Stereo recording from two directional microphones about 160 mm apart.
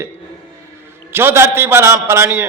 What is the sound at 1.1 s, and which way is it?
A man's voice, 15° right (ahead or behind).